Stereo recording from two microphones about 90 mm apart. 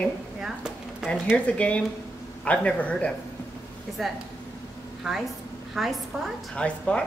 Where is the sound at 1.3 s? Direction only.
15° left (ahead or behind).